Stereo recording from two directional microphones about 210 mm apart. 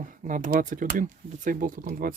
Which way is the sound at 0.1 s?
40° right (ahead or behind).